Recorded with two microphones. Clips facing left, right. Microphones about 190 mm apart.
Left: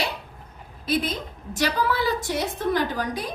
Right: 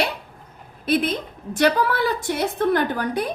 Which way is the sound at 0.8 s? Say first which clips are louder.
Right 4 dB; 60° right (ahead or behind).